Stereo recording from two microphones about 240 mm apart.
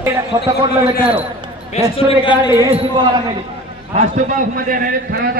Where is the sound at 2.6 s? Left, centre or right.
Right.